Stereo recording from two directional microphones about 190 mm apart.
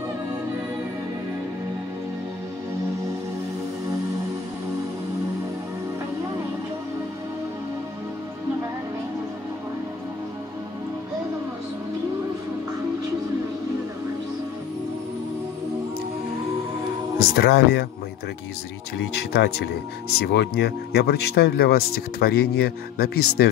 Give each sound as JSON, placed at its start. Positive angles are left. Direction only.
{"t": 17.2, "sound": "speech", "side_deg": 55}
{"t": 18.9, "sound": "speech", "side_deg": 60}